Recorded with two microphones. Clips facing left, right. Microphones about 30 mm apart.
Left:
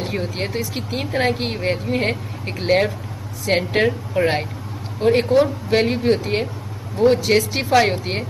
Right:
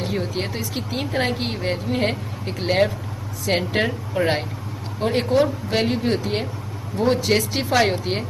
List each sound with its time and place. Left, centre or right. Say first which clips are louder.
0.0 s speech: left 1 dB; centre